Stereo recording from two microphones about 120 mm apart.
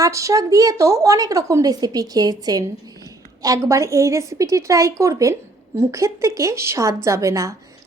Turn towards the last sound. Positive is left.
turn(degrees=-25)  # may be behind; listen again after turning